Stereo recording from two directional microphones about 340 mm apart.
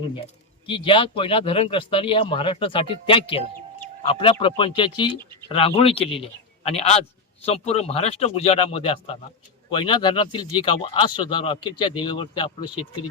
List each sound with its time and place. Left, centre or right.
0.7 s a man's voice: centre